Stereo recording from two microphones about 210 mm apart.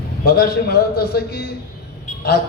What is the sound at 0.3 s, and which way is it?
A man's voice, 50° left (ahead or behind).